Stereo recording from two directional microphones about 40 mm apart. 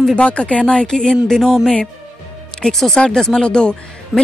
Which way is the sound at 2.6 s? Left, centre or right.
Centre.